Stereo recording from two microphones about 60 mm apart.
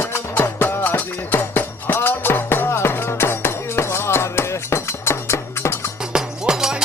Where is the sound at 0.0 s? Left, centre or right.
Left.